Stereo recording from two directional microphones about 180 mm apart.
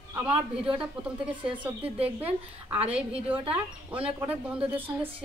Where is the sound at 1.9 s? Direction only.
30° right (ahead or behind).